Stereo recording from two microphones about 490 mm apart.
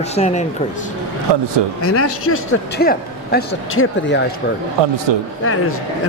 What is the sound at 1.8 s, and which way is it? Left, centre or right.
A man's voice, left.